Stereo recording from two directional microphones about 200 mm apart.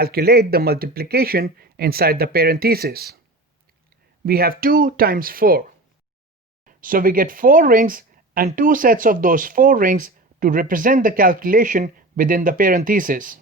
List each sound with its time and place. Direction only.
0.0 s speech: 50° right (ahead or behind)
4.3 s speech: 50° right (ahead or behind)
6.7 s speech: 45° right (ahead or behind)